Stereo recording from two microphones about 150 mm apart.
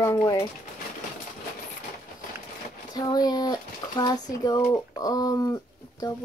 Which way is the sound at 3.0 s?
25° left (ahead or behind).